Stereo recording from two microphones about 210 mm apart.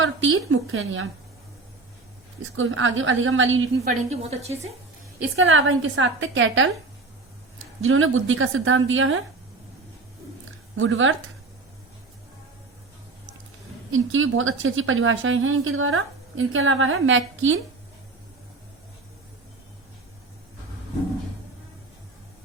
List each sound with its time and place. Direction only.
0.0 s a woman's voice: 70° right (ahead or behind)
2.4 s a woman's voice: 70° right (ahead or behind)
4.1 s speech: 30° right (ahead or behind)
5.4 s a woman's voice: 70° right (ahead or behind)
7.8 s a woman's voice: 70° right (ahead or behind)
10.8 s a woman's voice: 65° right (ahead or behind)
13.9 s a woman's voice: 70° right (ahead or behind)